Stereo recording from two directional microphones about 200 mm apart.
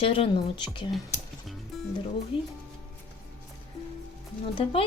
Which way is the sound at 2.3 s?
25° left (ahead or behind).